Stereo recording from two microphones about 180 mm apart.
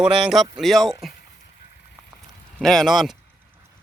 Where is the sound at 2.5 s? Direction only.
5° left (ahead or behind).